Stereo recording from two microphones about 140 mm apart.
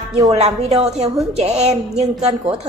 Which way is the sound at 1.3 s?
50° right (ahead or behind).